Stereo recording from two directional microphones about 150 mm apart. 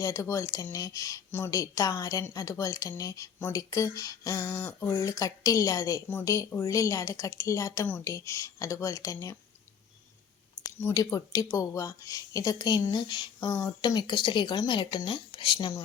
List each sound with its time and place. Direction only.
0.0 s speech: 20° left (ahead or behind)
10.8 s speech: 20° left (ahead or behind)